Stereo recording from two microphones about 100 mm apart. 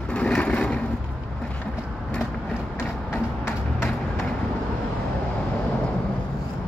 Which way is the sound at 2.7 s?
20° left (ahead or behind).